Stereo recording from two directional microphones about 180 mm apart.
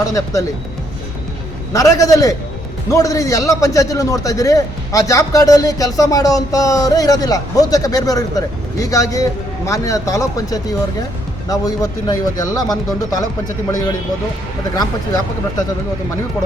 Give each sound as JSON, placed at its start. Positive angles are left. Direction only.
{"t": 0.0, "sound": "a man's voice", "side_deg": 20}
{"t": 1.7, "sound": "a man's voice", "side_deg": 20}
{"t": 14.8, "sound": "a man's voice", "side_deg": 20}